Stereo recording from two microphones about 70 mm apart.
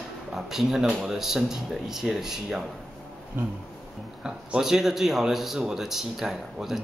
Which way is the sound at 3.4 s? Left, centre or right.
Right.